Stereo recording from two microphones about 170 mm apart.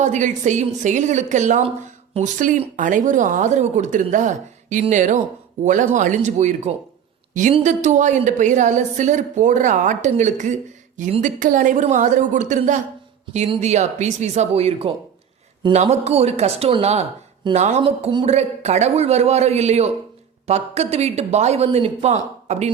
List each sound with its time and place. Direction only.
0.0 s a woman's voice: 45° right (ahead or behind)